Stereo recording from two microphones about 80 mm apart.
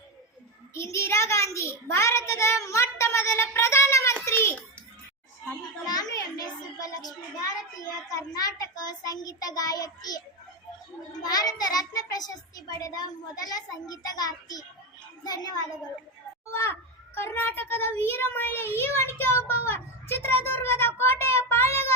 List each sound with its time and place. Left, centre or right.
0.7 s a child's voice: left
5.8 s a child's voice: left
16.5 s a child's voice: left